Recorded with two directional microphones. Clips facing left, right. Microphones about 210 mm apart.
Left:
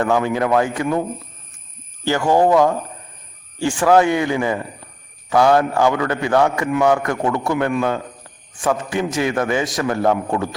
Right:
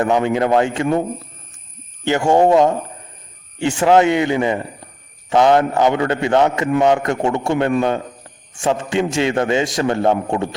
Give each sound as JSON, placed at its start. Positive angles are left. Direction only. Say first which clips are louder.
{"t": 0.0, "sound": "a man's voice", "louder": "right 2 dB", "side_deg": -25}
{"t": 2.0, "sound": "a man's voice", "louder": "right 2 dB", "side_deg": -25}